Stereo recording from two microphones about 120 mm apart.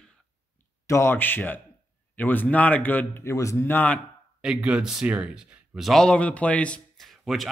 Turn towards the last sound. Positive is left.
turn(degrees=0)  # may be behind; listen again after turning